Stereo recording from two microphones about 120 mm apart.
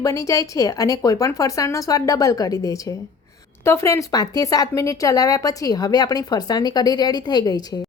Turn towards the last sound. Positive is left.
turn(degrees=35)  # may be behind; listen again after turning